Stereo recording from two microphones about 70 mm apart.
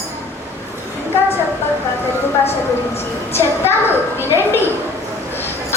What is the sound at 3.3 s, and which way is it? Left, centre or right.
A woman's voice, left.